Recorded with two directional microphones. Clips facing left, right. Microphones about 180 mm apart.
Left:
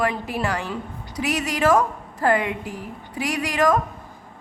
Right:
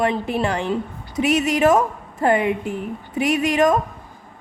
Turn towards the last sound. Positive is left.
turn(degrees=-20)  # may be behind; listen again after turning